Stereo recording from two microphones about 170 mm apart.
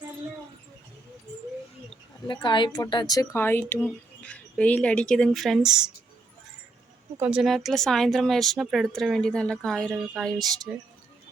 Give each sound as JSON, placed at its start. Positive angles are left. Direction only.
{"t": 2.2, "sound": "speech", "side_deg": 25}
{"t": 7.2, "sound": "speech", "side_deg": -5}